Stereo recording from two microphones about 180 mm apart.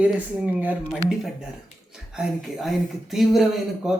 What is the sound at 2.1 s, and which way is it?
Speech, 5° right (ahead or behind).